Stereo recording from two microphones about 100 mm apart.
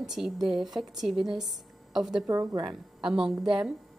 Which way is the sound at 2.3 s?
35° right (ahead or behind).